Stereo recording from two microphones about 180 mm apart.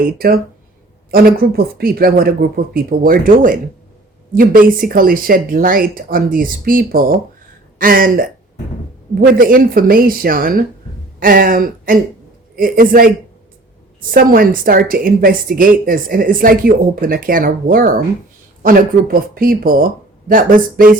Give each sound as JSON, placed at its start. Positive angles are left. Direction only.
{"t": 0.2, "sound": "a woman's voice", "side_deg": -60}